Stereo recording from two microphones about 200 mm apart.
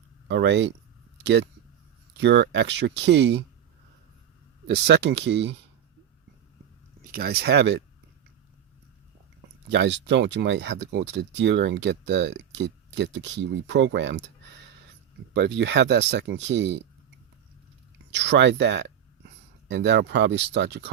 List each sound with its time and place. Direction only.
0.3 s speech: 60° right (ahead or behind)
4.6 s speech: 55° right (ahead or behind)
7.1 s speech: 50° right (ahead or behind)
9.6 s speech: 60° right (ahead or behind)
15.3 s speech: 60° right (ahead or behind)
18.1 s speech: 60° right (ahead or behind)